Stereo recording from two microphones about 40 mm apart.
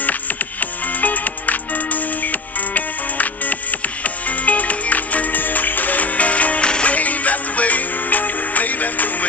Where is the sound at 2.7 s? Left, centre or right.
Left.